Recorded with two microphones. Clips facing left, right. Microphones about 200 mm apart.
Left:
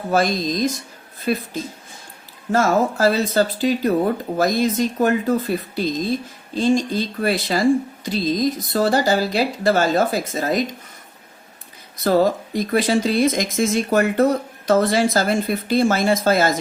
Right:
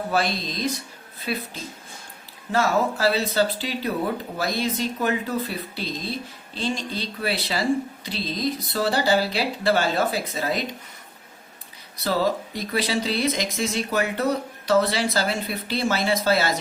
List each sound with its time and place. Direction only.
0.1 s speech: 45° left (ahead or behind)
2.5 s speech: 45° left (ahead or behind)
12.0 s speech: 50° left (ahead or behind)